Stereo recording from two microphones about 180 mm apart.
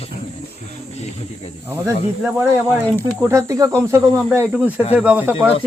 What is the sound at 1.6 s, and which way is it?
Speech, 15° right (ahead or behind).